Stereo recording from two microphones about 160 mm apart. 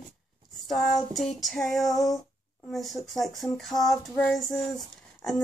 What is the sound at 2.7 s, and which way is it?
Speech, centre (ahead or behind).